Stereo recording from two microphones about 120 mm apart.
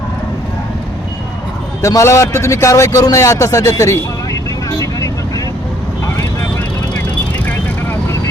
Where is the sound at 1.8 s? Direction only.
25° left (ahead or behind).